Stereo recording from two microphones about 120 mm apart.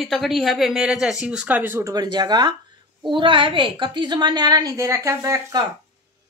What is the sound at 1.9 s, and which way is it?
A woman's voice, 35° right (ahead or behind).